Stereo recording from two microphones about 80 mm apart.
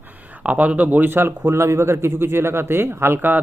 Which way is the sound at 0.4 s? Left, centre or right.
Centre.